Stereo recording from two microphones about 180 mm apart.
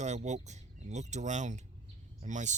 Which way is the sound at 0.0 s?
40° right (ahead or behind).